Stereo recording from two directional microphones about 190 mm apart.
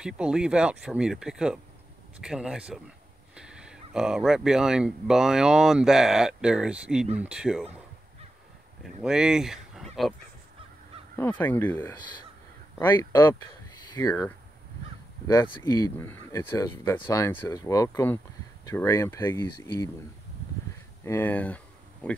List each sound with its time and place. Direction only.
0.0 s speech: 5° right (ahead or behind)
9.0 s speech: 5° right (ahead or behind)
11.1 s speech: 10° left (ahead or behind)
15.3 s speech: 20° left (ahead or behind)
21.0 s speech: 10° left (ahead or behind)